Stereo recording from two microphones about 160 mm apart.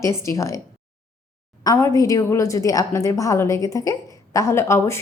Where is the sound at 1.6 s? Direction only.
20° left (ahead or behind).